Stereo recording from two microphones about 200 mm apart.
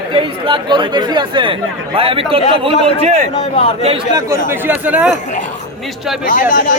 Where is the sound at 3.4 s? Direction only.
30° left (ahead or behind).